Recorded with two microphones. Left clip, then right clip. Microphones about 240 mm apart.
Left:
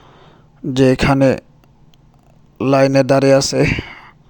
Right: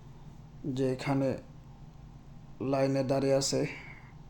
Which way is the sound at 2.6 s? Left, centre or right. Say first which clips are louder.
Left 17 dB; left.